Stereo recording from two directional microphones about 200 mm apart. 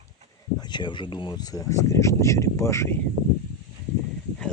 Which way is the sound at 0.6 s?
20° left (ahead or behind).